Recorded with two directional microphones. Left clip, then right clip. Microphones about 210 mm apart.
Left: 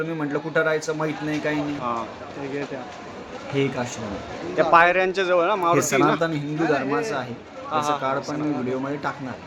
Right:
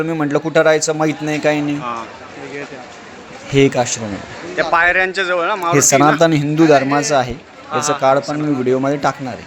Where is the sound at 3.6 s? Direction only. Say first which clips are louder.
Right 12 dB; 45° right (ahead or behind).